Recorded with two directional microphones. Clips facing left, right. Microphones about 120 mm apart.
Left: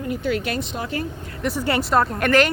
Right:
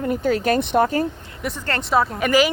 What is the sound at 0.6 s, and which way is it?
Speech, 60° right (ahead or behind).